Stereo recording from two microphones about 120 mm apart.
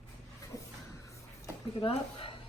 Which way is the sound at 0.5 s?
30° left (ahead or behind).